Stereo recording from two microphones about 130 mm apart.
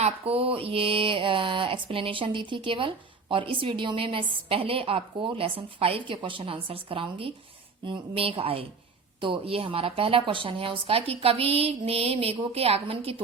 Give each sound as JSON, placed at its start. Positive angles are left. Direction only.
{"t": 0.0, "sound": "mantra", "side_deg": -50}